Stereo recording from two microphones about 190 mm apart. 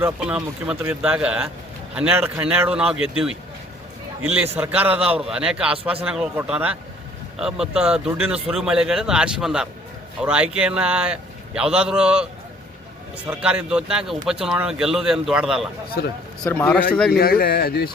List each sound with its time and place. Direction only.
0.0 s a man's voice: 5° right (ahead or behind)
4.5 s a man's voice: 10° right (ahead or behind)
13.4 s speech: 5° right (ahead or behind)
16.0 s speech: 60° left (ahead or behind)
16.4 s speech: 5° left (ahead or behind)
17.1 s speech: 55° left (ahead or behind)